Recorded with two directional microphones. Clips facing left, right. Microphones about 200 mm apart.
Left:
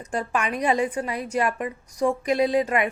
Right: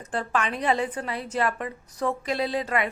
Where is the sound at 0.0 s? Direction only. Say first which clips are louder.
Left 1 dB; 10° left (ahead or behind).